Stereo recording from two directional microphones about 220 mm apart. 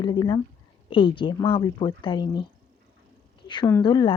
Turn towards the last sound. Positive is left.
turn(degrees=20)  # may be behind; listen again after turning